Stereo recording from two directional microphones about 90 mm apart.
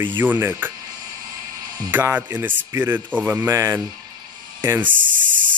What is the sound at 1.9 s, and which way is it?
Speech, 20° right (ahead or behind).